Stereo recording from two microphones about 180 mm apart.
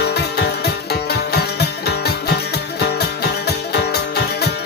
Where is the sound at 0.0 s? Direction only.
65° left (ahead or behind).